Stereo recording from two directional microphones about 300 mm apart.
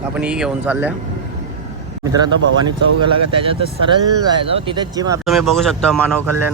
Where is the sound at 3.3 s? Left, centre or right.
Centre.